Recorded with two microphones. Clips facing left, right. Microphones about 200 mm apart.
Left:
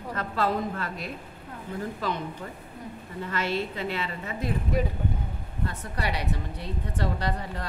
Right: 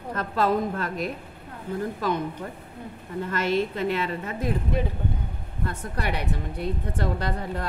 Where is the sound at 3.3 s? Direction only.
50° right (ahead or behind).